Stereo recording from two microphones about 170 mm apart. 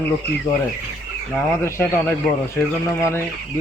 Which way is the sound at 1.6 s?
15° left (ahead or behind).